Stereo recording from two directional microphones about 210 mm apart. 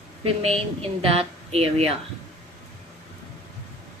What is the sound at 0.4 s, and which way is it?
A woman's voice, 25° right (ahead or behind).